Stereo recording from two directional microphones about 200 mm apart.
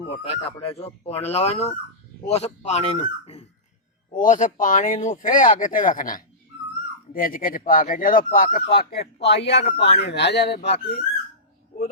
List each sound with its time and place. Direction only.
0.0 s speech: 30° left (ahead or behind); by 11.0 s 55° left (ahead or behind)